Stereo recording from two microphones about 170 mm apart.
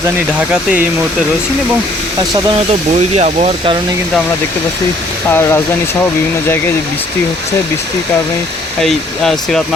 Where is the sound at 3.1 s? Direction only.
40° right (ahead or behind).